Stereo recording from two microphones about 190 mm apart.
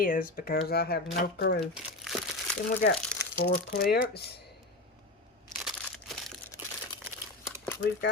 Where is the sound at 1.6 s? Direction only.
Centre (ahead or behind).